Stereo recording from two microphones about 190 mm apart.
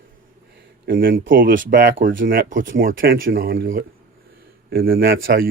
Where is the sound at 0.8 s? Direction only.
50° right (ahead or behind).